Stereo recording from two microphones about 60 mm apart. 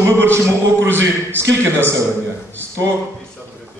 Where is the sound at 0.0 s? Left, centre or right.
Right.